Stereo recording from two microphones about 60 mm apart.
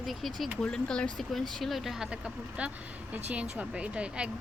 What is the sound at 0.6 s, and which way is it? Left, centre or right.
Speech, centre.